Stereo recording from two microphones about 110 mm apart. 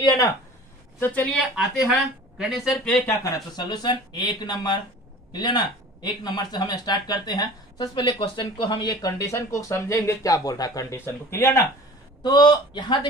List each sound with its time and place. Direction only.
0.0 s a sound: 35° left (ahead or behind)
0.9 s a woman's voice: 15° left (ahead or behind)
1.3 s speech: centre (ahead or behind)
3.3 s speech: 40° left (ahead or behind); by 11.6 s 25° left (ahead or behind)
12.2 s speech: 40° left (ahead or behind)